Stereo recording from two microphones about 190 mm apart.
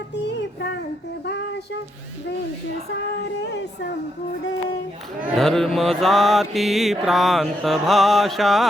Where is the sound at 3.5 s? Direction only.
65° left (ahead or behind).